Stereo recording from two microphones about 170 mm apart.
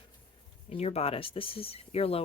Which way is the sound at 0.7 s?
40° left (ahead or behind).